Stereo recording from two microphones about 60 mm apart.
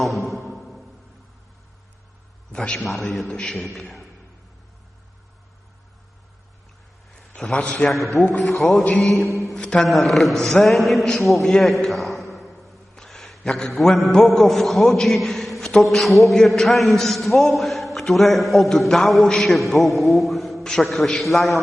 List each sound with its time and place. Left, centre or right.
0.0 s music: centre
2.5 s a man's voice: centre
7.2 s a sound: centre
7.6 s a man's voice: left
7.9 s a man's voice: centre
9.3 s mantra: centre
9.6 s a man's voice: centre
9.8 s a man's voice: centre